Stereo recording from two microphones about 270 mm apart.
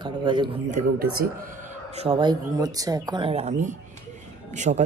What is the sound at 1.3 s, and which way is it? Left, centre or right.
Speech, right.